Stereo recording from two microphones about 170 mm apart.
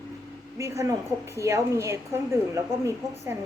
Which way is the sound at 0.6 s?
15° right (ahead or behind).